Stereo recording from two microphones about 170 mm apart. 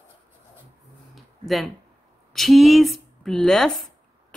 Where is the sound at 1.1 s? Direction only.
Centre (ahead or behind).